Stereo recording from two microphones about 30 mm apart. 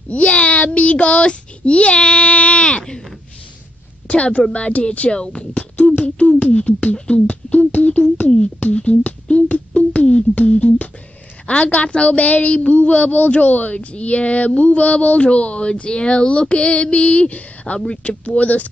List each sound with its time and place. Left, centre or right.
0.1 s child singing: left
0.7 s speech: left
4.1 s speech: left
5.2 s speech: left
5.5 s beatboxing: left
5.9 s speech: left
11.4 s a child's voice: left
13.7 s speech: left